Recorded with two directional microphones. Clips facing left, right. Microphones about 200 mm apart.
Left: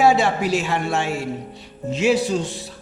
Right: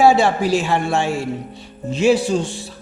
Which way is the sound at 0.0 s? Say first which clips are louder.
Right 3 dB; 30° right (ahead or behind).